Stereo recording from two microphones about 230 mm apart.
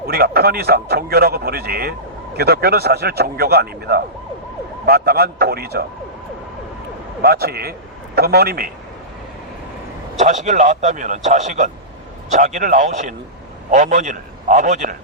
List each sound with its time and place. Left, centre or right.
0.1 s speech: right
7.2 s a man's voice: right
10.2 s a man's voice: right